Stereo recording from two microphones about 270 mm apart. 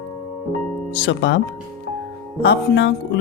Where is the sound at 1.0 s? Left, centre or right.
Left.